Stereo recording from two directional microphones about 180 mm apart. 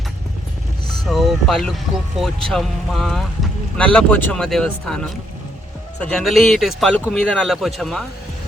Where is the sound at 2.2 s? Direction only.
Centre (ahead or behind).